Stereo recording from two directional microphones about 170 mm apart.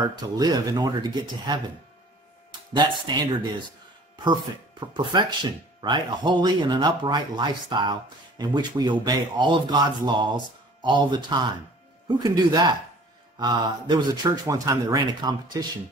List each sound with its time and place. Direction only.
0.0 s speech: 25° right (ahead or behind)
2.7 s speech: 25° right (ahead or behind)